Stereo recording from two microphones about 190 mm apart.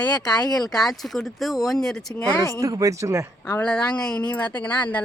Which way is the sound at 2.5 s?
15° right (ahead or behind).